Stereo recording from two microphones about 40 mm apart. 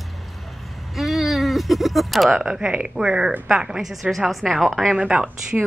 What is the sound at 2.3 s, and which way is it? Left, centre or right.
A woman's voice, centre.